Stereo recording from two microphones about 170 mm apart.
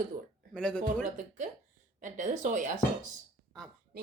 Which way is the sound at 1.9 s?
50° right (ahead or behind).